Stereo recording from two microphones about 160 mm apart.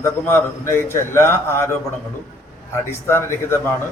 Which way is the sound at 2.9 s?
15° left (ahead or behind).